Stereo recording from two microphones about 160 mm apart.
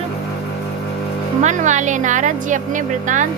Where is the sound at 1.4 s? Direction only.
50° right (ahead or behind).